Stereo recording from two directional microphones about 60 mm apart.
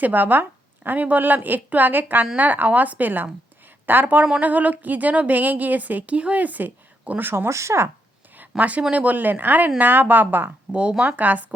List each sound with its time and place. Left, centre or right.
0.0 s a woman's voice: right
7.3 s speech: right
8.4 s a sound: right
8.9 s a woman's voice: right
10.7 s a woman's voice: centre